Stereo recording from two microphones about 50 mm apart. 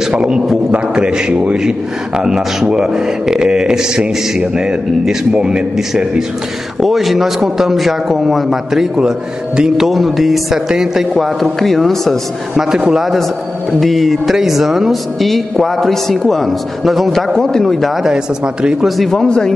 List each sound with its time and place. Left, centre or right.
0.0 s a man's voice: centre
6.8 s a man's voice: centre
12.5 s a man's voice: centre
13.7 s a man's voice: centre
17.3 s a man's voice: centre
18.0 s a man's voice: centre
18.9 s a man's voice: centre
19.1 s a man's voice: centre